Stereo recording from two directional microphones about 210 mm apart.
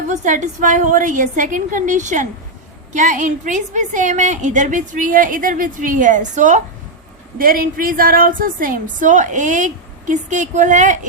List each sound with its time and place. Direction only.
0.1 s a woman's voice: 35° right (ahead or behind)